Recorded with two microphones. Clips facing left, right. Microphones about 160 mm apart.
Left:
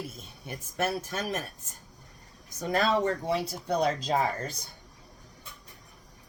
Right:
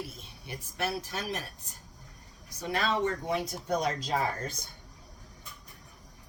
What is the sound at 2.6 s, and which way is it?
Speech, 40° left (ahead or behind).